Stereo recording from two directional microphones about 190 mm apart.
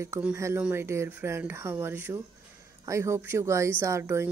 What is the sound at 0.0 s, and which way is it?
A woman's voice, 15° right (ahead or behind).